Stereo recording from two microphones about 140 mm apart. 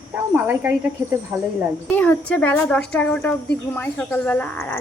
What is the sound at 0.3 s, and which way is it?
Speech, 15° right (ahead or behind).